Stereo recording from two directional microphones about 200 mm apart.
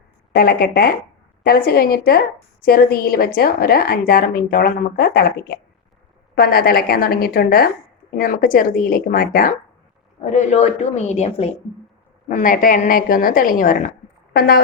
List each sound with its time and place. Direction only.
0.3 s a woman's voice: 50° left (ahead or behind); by 11.5 s 30° left (ahead or behind)
12.3 s a woman's voice: 45° left (ahead or behind)